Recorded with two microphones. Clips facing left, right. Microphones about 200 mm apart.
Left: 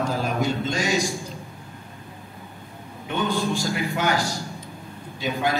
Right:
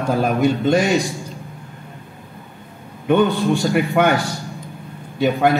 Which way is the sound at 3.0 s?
60° right (ahead or behind).